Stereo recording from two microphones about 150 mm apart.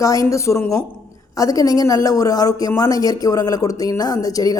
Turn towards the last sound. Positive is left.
turn(degrees=25)  # may be behind; listen again after turning